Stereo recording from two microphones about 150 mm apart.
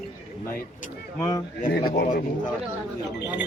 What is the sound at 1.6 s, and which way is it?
Speech, 70° left (ahead or behind).